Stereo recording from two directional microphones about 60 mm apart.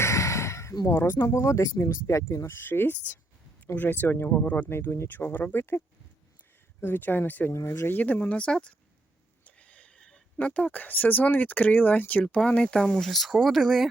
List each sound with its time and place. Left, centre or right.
0.0 s a sound: left
0.9 s speech: left
2.5 s speech: left
4.7 s speech: left
6.8 s speech: left
7.5 s speech: left
7.9 s speech: left
9.6 s a sound: left
10.3 s speech: left
12.2 s speech: centre
13.1 s speech: centre